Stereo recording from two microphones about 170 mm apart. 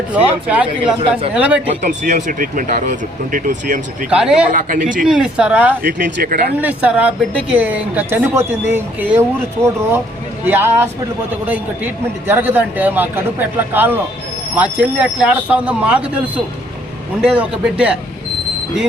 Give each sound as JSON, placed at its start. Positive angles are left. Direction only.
{"t": 0.1, "sound": "speech", "side_deg": -10}
{"t": 1.6, "sound": "speech", "side_deg": -45}
{"t": 4.1, "sound": "speech", "side_deg": -5}
{"t": 4.5, "sound": "speech", "side_deg": -50}
{"t": 5.0, "sound": "speech", "side_deg": -5}
{"t": 5.8, "sound": "speech", "side_deg": -60}
{"t": 6.6, "sound": "speech", "side_deg": -10}
{"t": 10.4, "sound": "speech", "side_deg": -15}